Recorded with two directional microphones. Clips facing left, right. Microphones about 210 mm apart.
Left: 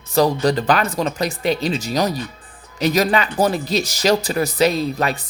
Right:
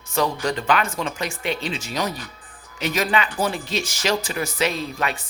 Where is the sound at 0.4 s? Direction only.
35° left (ahead or behind).